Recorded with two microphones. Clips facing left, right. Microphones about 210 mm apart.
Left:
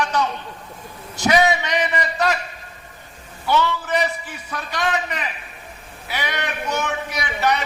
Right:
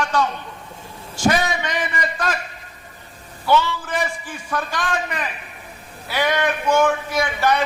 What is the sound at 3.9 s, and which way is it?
Speech, 50° right (ahead or behind).